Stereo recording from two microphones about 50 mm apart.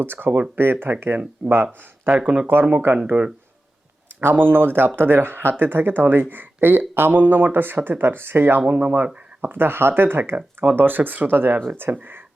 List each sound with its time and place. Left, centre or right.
0.0 s speech: right
0.3 s speech: right
0.6 s speech: right
2.2 s speech: centre
3.1 s speech: right
4.2 s speech: right